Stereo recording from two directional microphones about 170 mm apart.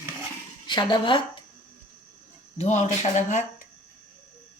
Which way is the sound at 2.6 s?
45° left (ahead or behind).